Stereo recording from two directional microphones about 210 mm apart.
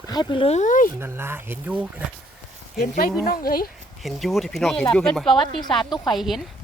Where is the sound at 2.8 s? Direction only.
45° left (ahead or behind).